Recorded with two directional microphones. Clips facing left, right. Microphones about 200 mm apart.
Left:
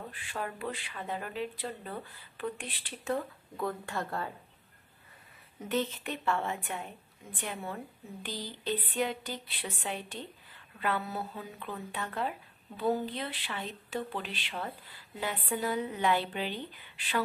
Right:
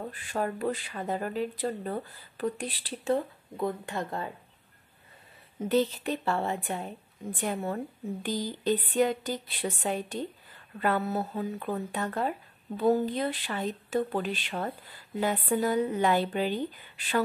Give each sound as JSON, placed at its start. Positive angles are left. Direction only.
{"t": 0.1, "sound": "speech", "side_deg": -40}
{"t": 5.6, "sound": "a woman's voice", "side_deg": -35}